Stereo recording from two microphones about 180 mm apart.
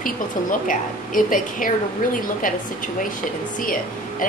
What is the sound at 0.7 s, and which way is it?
A woman's voice, 50° left (ahead or behind).